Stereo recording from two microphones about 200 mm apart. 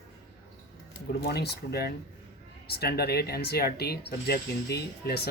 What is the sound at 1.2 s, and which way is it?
Speech, 55° left (ahead or behind).